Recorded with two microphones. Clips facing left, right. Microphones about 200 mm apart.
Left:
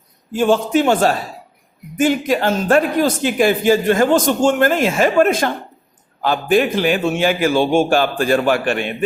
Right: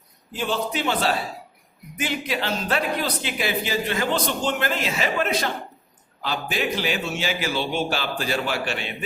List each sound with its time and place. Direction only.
0.3 s a man's voice: 50° left (ahead or behind)